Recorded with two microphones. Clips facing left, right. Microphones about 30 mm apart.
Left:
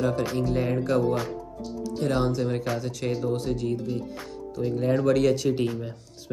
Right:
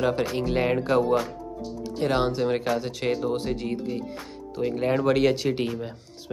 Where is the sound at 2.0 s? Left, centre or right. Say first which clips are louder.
Right 2 dB; right.